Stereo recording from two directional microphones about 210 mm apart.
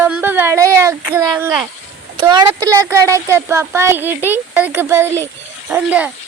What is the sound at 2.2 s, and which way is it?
A child's voice, 20° right (ahead or behind).